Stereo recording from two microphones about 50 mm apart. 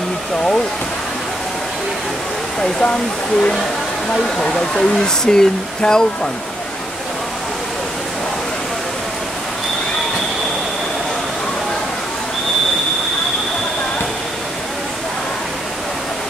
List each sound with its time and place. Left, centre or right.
2.6 s speech: left